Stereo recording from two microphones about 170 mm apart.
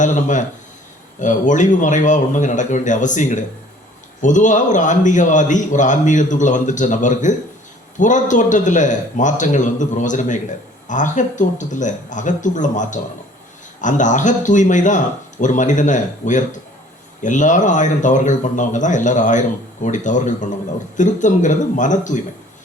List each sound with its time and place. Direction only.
0.0 s speech: 45° left (ahead or behind)